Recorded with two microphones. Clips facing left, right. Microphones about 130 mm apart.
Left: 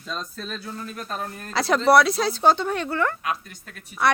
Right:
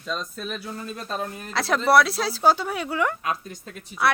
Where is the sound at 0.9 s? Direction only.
15° right (ahead or behind).